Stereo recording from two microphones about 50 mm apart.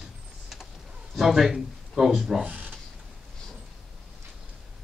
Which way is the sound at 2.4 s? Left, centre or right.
Right.